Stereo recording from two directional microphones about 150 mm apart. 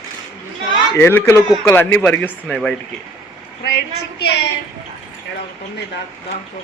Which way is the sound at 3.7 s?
90° left.